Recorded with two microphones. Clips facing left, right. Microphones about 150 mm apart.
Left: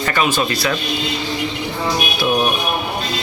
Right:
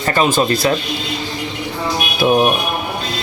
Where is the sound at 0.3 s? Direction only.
45° right (ahead or behind).